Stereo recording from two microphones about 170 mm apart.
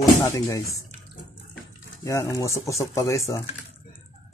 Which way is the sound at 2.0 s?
15° left (ahead or behind).